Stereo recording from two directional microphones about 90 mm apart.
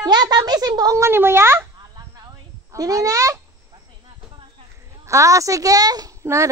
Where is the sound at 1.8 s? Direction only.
50° right (ahead or behind).